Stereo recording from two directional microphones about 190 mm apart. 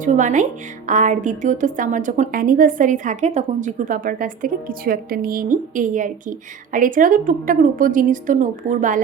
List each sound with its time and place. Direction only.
0.0 s a woman's voice: 40° right (ahead or behind)